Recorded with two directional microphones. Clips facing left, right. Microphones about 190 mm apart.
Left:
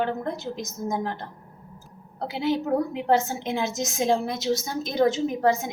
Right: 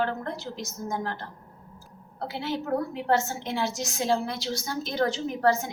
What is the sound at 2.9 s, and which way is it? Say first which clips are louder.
A woman's voice: left 3 dB; 15° left (ahead or behind).